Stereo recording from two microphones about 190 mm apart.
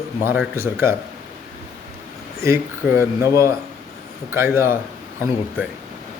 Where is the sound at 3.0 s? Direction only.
15° right (ahead or behind).